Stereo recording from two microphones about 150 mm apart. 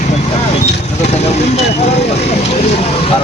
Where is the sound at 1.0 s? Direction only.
45° left (ahead or behind).